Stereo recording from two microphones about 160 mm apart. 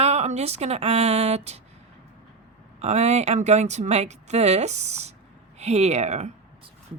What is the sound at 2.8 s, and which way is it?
Speech, 45° right (ahead or behind).